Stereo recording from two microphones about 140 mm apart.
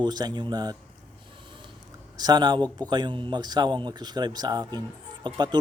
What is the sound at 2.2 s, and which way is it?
A man's voice, 30° right (ahead or behind).